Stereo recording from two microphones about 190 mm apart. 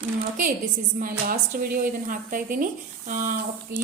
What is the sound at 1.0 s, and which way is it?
A woman's voice, 50° right (ahead or behind).